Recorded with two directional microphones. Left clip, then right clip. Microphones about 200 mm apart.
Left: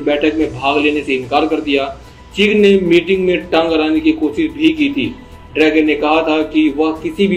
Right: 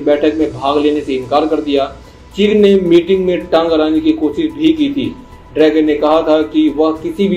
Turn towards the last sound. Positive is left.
turn(degrees=-25)  # may be behind; listen again after turning